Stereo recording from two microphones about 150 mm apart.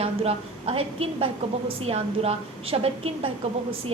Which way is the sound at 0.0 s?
40° right (ahead or behind).